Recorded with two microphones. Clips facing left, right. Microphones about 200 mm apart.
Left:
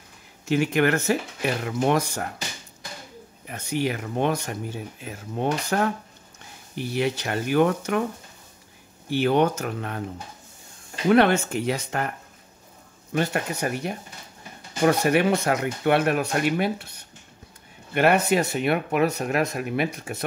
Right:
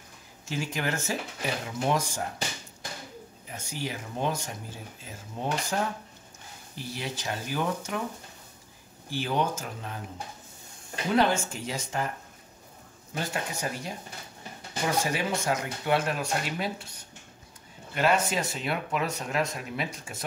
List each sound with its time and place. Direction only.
0.5 s speech: 65° left (ahead or behind)
3.4 s speech: 65° left (ahead or behind)
9.1 s speech: 65° left (ahead or behind)
11.1 s speech: 65° left (ahead or behind)
13.1 s speech: 65° left (ahead or behind)
17.9 s speech: 65° left (ahead or behind)